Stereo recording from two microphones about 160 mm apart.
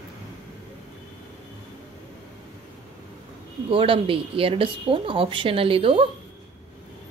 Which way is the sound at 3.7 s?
35° right (ahead or behind).